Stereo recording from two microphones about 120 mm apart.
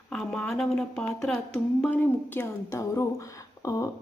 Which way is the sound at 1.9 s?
15° left (ahead or behind).